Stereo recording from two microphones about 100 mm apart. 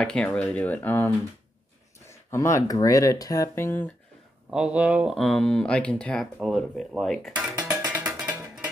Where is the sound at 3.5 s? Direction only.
20° left (ahead or behind).